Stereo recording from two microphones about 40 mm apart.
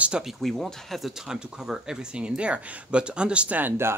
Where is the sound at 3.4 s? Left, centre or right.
Right.